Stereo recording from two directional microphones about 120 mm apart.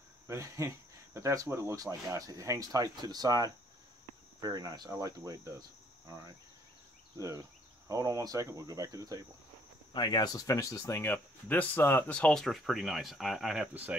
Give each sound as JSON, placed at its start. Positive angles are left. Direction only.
{"t": 0.3, "sound": "speech", "side_deg": -25}
{"t": 6.0, "sound": "cricket", "side_deg": -30}
{"t": 7.2, "sound": "speech", "side_deg": -25}
{"t": 9.9, "sound": "speech", "side_deg": 35}
{"t": 12.1, "sound": "speech", "side_deg": 10}